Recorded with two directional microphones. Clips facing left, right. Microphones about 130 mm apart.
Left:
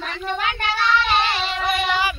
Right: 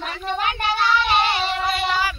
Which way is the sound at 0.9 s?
15° right (ahead or behind).